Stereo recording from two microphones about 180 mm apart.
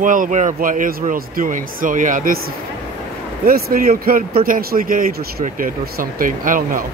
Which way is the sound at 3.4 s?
55° right (ahead or behind).